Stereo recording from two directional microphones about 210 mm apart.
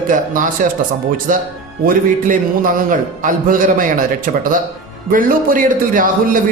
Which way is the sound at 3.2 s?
40° right (ahead or behind).